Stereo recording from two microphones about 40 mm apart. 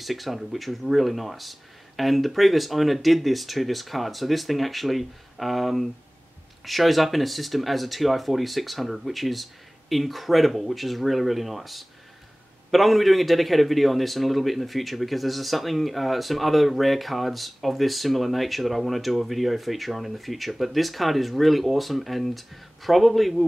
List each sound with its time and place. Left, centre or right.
0.0 s a man's voice: centre